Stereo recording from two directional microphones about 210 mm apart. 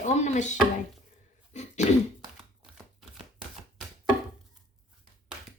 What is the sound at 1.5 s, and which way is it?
Throat clearing, 35° left (ahead or behind).